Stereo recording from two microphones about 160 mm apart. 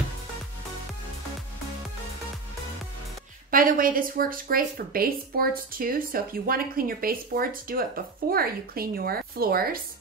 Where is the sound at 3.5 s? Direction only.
60° right (ahead or behind).